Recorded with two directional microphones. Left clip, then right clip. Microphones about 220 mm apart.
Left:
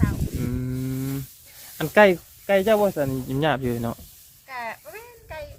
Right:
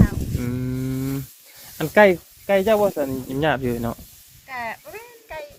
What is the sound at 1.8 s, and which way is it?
Speech, 10° left (ahead or behind).